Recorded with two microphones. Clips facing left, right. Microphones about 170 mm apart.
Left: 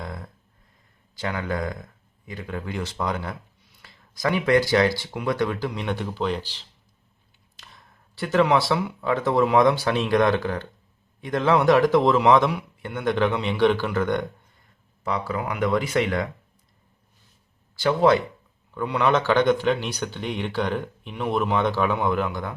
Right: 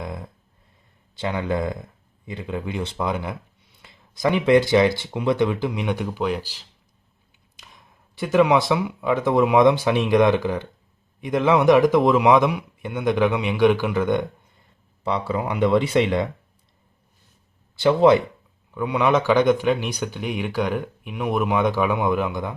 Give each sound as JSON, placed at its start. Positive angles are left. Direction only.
{"t": 0.0, "sound": "a sound", "side_deg": -20}
{"t": 1.4, "sound": "speech", "side_deg": -25}
{"t": 15.0, "sound": "speech", "side_deg": -25}
{"t": 17.7, "sound": "speech", "side_deg": -20}